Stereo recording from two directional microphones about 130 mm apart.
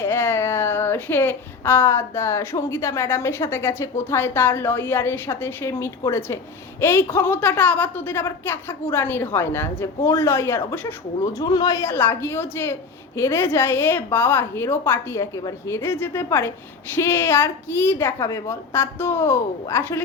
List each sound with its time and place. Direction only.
0.0 s speech: 20° left (ahead or behind)
11.3 s a woman's voice: 30° left (ahead or behind)